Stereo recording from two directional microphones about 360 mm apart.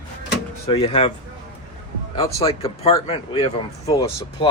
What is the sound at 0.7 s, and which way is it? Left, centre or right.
Speech, centre.